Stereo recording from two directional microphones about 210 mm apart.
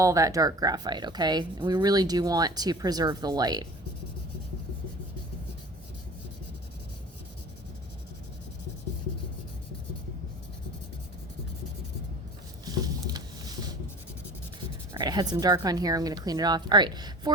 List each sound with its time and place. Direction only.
0.0 s a woman's voice: 15° right (ahead or behind)
12.8 s a sound: 20° right (ahead or behind)
14.9 s a woman's voice: 20° right (ahead or behind)